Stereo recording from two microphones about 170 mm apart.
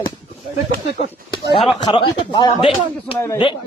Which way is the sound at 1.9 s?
30° left (ahead or behind).